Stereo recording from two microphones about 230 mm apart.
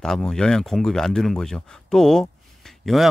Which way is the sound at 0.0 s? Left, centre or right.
Centre.